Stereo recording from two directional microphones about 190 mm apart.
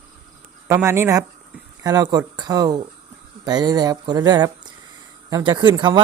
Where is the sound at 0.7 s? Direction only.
15° right (ahead or behind).